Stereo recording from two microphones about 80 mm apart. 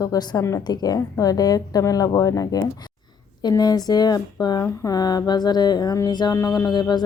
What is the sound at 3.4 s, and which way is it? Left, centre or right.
Speech, left.